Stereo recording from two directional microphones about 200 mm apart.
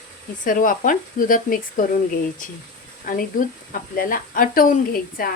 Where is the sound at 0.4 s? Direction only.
45° left (ahead or behind).